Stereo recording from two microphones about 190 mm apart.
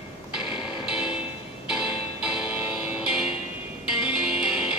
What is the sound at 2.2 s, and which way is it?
Music, 5° right (ahead or behind).